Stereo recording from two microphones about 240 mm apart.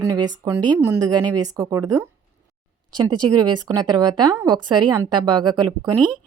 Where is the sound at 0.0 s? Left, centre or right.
Centre.